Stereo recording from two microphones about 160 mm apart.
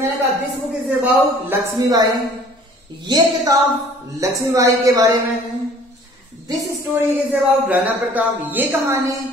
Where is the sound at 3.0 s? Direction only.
25° right (ahead or behind).